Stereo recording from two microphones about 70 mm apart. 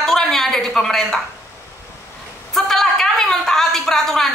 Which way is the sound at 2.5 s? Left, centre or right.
Centre.